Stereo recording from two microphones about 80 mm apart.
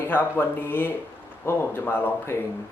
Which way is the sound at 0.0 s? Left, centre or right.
Left.